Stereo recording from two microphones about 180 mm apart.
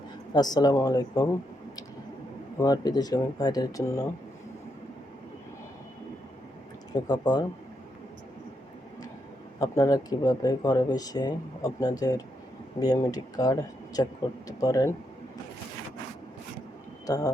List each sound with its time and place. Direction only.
0.3 s speech: 20° left (ahead or behind)
6.9 s speech: 25° left (ahead or behind)
9.6 s speech: 20° left (ahead or behind)
17.1 s speech: 20° left (ahead or behind)